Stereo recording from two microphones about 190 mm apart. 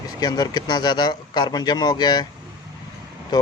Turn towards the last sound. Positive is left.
turn(degrees=20)  # may be behind; listen again after turning